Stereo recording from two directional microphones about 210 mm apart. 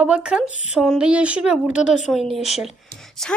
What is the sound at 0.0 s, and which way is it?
A woman's voice, 5° right (ahead or behind).